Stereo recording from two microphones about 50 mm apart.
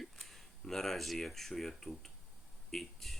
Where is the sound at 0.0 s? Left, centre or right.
Centre.